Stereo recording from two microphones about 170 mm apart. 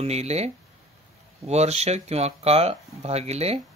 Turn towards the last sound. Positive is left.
turn(degrees=-40)  # may be behind; listen again after turning